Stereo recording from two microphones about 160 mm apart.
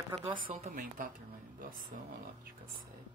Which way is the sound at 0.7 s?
60° right (ahead or behind).